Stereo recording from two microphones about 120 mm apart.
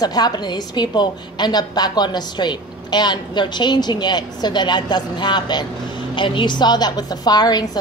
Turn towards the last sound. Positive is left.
turn(degrees=35)  # may be behind; listen again after turning